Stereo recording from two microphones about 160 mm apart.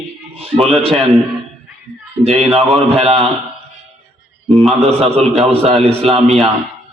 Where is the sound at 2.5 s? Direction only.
35° right (ahead or behind).